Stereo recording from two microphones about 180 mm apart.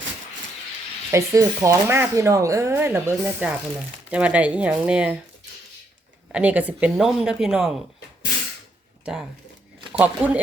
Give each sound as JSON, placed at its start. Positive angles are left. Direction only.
{"t": 1.1, "sound": "speech", "side_deg": -15}
{"t": 6.3, "sound": "speech", "side_deg": -10}
{"t": 10.0, "sound": "speech", "side_deg": -10}